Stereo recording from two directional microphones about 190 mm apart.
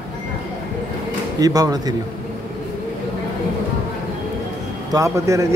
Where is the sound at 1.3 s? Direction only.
20° right (ahead or behind).